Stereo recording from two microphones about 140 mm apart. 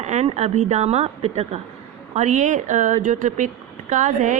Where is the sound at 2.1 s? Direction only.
65° right (ahead or behind).